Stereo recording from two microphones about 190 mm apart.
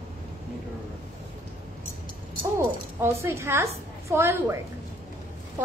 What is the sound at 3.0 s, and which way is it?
A woman's voice, 15° right (ahead or behind).